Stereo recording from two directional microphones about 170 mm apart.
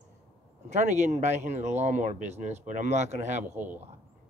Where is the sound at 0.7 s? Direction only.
45° right (ahead or behind).